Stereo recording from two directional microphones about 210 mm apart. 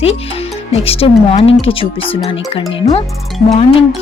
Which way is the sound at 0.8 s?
25° left (ahead or behind).